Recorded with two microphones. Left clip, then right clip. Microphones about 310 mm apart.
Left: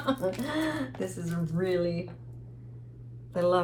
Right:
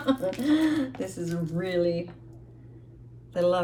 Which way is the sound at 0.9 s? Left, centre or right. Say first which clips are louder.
Right 3 dB; centre.